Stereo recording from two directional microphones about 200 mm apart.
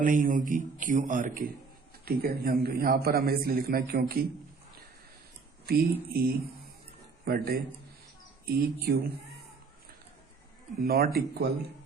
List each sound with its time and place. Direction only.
0.0 s a man's voice: 40° right (ahead or behind)
5.6 s a man's voice: 50° right (ahead or behind)
10.8 s a man's voice: 50° right (ahead or behind)